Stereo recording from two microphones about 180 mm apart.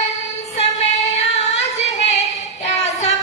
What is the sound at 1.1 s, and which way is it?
Female singing, 40° left (ahead or behind).